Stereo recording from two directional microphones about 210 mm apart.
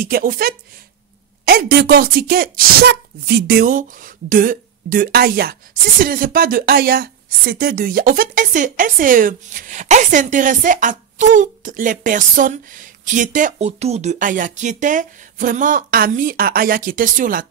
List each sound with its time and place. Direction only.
0.0 s speech: 45° right (ahead or behind)